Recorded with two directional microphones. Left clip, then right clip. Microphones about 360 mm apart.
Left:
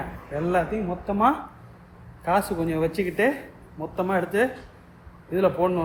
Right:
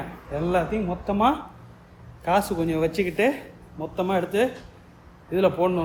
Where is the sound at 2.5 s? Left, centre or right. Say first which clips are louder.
Right 1 dB; centre.